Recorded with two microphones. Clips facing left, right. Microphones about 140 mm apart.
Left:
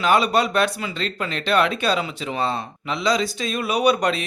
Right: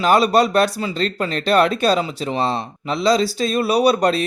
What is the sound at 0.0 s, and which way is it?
Speech, 35° right (ahead or behind).